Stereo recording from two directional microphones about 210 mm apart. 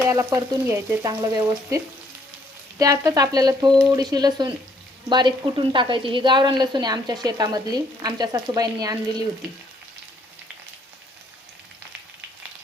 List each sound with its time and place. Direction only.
0.1 s speech: 15° right (ahead or behind)
3.7 s speech: 5° left (ahead or behind)
3.9 s a woman's voice: 20° right (ahead or behind)